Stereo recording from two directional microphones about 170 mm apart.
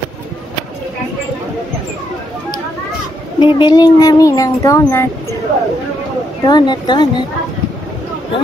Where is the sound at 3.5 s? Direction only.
25° left (ahead or behind).